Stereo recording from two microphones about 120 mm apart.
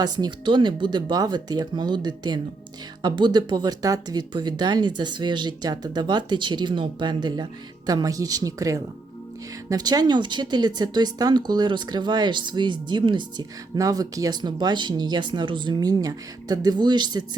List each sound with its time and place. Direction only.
0.0 s a woman's voice: 35° right (ahead or behind)